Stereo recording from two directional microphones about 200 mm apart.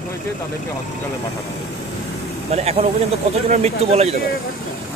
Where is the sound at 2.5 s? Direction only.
30° right (ahead or behind).